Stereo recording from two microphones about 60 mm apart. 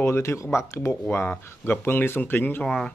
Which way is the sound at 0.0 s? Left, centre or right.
Left.